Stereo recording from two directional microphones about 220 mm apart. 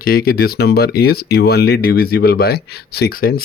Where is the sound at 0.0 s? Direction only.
45° left (ahead or behind).